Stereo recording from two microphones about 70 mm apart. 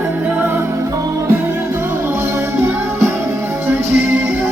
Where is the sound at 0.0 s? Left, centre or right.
Right.